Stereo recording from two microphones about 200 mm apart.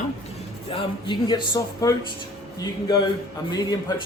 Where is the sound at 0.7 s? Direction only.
25° left (ahead or behind).